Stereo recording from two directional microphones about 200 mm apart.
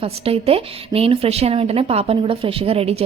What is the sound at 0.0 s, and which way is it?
A woman's voice, 30° right (ahead or behind).